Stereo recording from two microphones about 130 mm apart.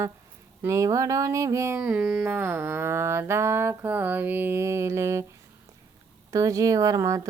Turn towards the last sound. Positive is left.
turn(degrees=-25)  # may be behind; listen again after turning